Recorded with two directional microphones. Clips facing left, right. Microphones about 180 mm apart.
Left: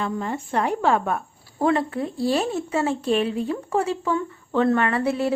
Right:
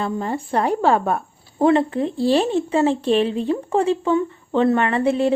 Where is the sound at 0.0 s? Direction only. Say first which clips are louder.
Right 3 dB; 35° right (ahead or behind).